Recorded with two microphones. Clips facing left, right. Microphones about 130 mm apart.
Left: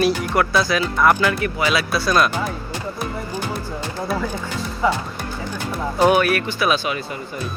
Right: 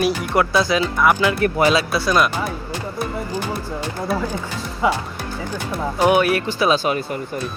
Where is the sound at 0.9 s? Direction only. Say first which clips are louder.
Left 1 dB; 10° right (ahead or behind).